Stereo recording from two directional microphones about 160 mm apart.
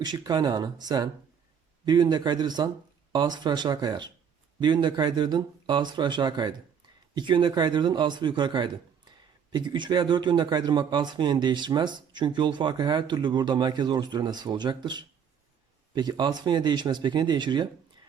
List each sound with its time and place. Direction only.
0.0 s speech: 25° right (ahead or behind)